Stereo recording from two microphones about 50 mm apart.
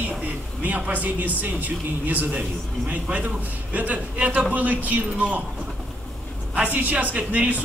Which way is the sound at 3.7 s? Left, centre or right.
Right.